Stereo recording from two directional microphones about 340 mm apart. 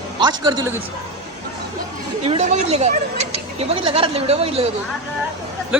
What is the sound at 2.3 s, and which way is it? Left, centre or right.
Speech, centre.